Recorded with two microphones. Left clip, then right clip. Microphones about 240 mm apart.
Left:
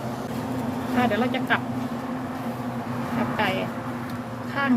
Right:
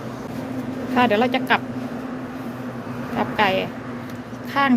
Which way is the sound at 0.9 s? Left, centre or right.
Right.